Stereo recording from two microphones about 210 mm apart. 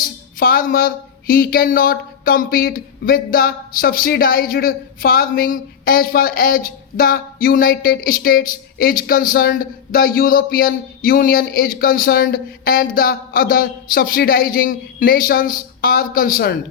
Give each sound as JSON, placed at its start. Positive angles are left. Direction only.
{"t": 0.0, "sound": "speech", "side_deg": 45}